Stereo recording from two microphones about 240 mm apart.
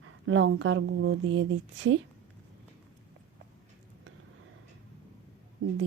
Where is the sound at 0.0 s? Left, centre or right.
Right.